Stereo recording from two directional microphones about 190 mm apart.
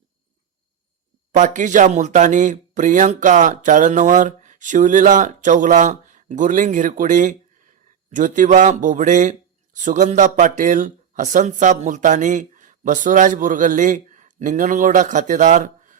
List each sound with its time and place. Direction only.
1.4 s speech: 40° right (ahead or behind)